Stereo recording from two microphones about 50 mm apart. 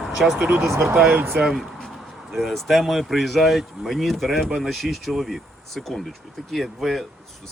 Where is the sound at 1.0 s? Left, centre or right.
Right.